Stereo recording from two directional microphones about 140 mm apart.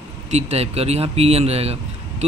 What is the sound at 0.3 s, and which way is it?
Speech, 50° right (ahead or behind).